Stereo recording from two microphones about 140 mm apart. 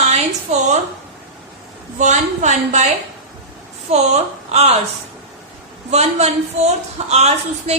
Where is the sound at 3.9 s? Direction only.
50° right (ahead or behind).